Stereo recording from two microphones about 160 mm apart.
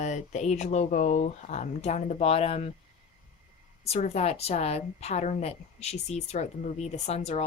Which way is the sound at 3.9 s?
45° left (ahead or behind).